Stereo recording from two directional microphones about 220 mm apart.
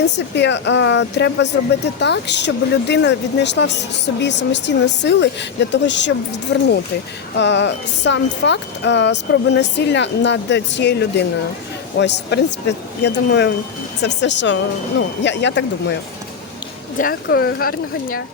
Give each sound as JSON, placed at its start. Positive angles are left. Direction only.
{"t": 0.0, "sound": "speech", "side_deg": 50}
{"t": 17.0, "sound": "speech", "side_deg": 45}